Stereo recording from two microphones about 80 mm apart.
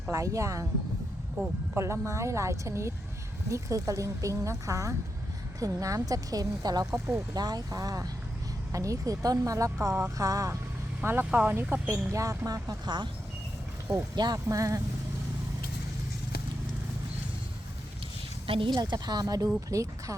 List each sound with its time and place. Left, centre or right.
0.1 s a woman's voice: right
11.0 s speech: right
12.5 s a woman's voice: right
13.9 s speech: centre
14.3 s a woman's voice: right
18.4 s a woman's voice: right